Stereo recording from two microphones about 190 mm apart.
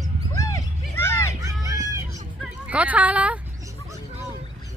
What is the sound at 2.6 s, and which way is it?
Speech, 5° right (ahead or behind).